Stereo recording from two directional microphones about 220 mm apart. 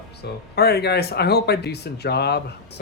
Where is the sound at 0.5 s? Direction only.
45° left (ahead or behind).